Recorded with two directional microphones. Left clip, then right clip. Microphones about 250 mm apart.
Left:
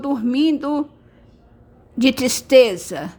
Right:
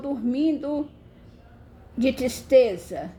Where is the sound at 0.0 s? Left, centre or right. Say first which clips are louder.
Left 6 dB; left.